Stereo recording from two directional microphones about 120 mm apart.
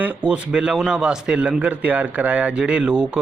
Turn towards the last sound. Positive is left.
turn(degrees=-10)  # may be behind; listen again after turning